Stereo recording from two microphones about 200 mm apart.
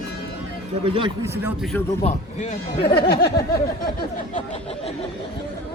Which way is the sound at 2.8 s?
55° left (ahead or behind).